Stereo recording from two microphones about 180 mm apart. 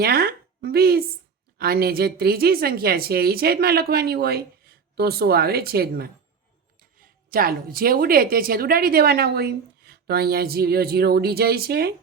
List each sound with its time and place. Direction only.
0.0 s a woman's voice: 60° right (ahead or behind)
7.3 s a woman's voice: 55° right (ahead or behind)